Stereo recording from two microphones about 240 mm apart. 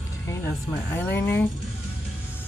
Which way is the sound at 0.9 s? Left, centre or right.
Centre.